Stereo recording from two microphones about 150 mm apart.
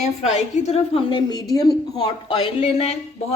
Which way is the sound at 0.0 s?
45° left (ahead or behind).